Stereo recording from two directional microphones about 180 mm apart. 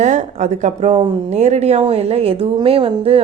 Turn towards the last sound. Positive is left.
turn(degrees=-30)  # may be behind; listen again after turning